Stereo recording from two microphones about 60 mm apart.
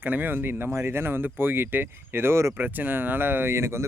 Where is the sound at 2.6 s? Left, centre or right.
Right.